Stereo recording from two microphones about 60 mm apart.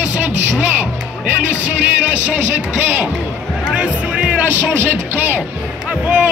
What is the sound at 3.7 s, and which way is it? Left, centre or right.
Speech, centre.